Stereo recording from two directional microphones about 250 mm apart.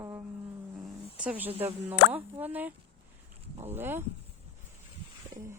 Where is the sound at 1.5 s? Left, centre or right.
Right.